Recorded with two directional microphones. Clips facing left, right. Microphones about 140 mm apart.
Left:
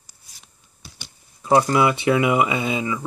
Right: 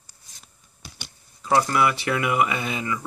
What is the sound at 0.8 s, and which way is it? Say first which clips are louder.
Typing: right 1 dB; 60° right (ahead or behind).